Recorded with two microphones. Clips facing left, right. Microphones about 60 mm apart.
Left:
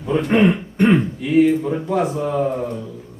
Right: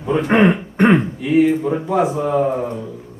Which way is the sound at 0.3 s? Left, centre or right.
Centre.